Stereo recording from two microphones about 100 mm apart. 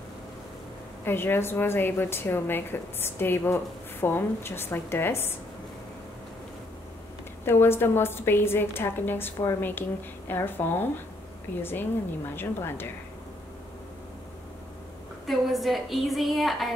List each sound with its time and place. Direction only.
1.0 s a woman's voice: 25° left (ahead or behind)
7.4 s a woman's voice: 25° left (ahead or behind)
15.2 s a woman's voice: centre (ahead or behind)